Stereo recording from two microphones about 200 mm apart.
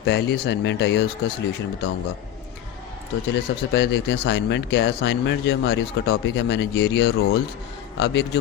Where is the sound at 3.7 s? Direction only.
55° left (ahead or behind).